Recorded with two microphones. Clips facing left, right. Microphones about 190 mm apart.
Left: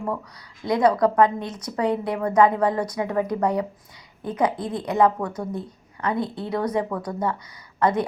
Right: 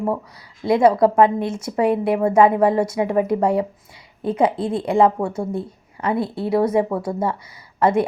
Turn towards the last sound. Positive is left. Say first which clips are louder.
# right 4 dB
turn(degrees=-25)  # may be behind; listen again after turning